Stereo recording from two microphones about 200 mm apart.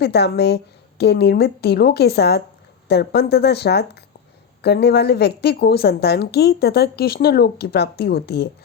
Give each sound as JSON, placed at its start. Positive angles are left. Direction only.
{"t": 0.0, "sound": "a woman's voice", "side_deg": 55}